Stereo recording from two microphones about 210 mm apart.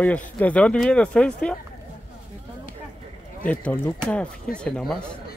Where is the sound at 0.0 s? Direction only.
5° left (ahead or behind).